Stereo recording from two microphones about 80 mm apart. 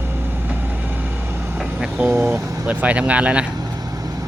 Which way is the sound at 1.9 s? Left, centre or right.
Right.